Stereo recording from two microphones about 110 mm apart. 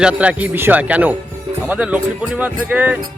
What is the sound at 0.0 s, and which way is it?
Speech, 10° right (ahead or behind).